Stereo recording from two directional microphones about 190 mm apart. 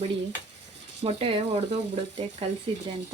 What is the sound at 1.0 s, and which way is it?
Speech, 30° right (ahead or behind).